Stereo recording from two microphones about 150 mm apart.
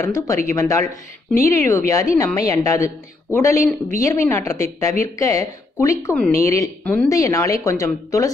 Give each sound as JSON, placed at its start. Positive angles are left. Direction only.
{"t": 0.0, "sound": "a woman's voice", "side_deg": 20}
{"t": 6.8, "sound": "speech", "side_deg": 10}
{"t": 7.1, "sound": "a woman's voice", "side_deg": 20}